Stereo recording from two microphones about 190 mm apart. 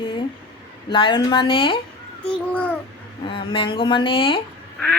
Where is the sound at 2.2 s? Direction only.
5° left (ahead or behind).